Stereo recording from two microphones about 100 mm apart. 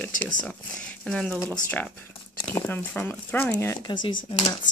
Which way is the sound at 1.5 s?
15° left (ahead or behind).